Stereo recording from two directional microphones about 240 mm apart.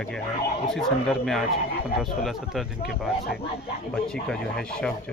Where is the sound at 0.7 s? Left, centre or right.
Centre.